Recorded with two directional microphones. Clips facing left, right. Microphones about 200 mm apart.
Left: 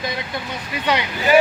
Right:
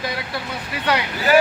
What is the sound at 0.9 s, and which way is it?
Speech, 10° left (ahead or behind).